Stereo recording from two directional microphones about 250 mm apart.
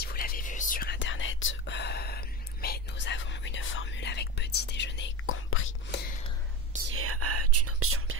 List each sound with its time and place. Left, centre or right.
0.0 s whispering: left
6.9 s whispering: right